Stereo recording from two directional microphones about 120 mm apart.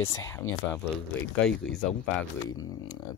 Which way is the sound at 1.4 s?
5° left (ahead or behind).